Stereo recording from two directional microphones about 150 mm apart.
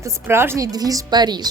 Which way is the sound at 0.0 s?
15° right (ahead or behind).